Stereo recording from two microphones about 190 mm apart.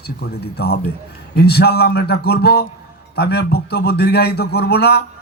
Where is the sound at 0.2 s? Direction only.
60° left (ahead or behind).